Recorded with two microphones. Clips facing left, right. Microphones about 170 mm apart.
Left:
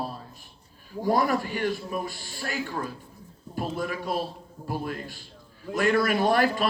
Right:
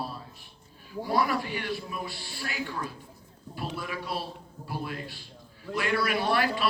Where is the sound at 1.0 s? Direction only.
45° left (ahead or behind).